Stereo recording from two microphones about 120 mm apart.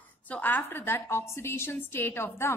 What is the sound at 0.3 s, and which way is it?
A woman's voice, 15° left (ahead or behind).